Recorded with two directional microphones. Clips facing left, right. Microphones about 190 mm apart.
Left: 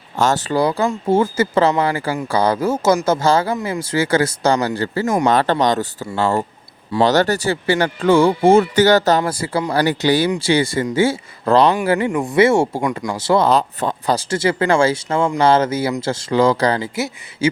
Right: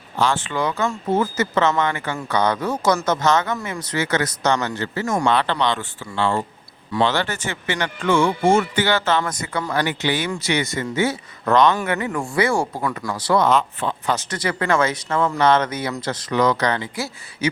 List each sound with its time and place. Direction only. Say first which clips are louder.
0.2 s speech: left 5 dB; 40° left (ahead or behind)
12.1 s speech: left 6 dB; 20° left (ahead or behind)